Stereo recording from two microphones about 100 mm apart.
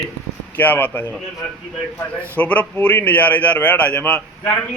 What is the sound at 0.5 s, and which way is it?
Speech, 20° left (ahead or behind).